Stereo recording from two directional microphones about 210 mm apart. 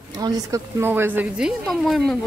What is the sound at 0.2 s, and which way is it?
Speech, 15° right (ahead or behind).